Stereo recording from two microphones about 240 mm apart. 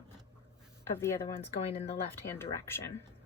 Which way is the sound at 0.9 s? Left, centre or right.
Centre.